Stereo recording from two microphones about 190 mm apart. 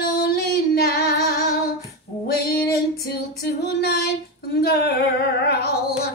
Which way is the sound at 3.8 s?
60° left (ahead or behind).